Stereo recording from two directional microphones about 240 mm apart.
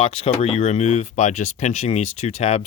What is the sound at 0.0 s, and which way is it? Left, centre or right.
Speech, left.